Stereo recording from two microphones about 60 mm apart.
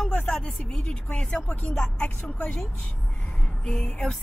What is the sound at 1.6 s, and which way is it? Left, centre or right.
Speech, centre.